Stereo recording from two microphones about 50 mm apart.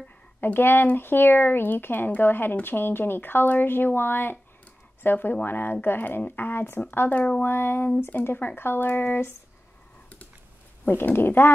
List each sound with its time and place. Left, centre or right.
0.4 s speech: left
7.2 s speech: left
7.4 s speech: left
11.1 s speech: left